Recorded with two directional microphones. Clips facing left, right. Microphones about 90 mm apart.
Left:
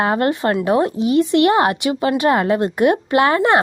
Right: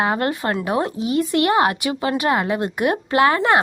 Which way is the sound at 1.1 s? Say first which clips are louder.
Left 3 dB; 25° left (ahead or behind).